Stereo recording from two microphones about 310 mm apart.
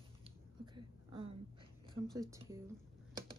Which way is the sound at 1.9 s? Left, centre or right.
Centre.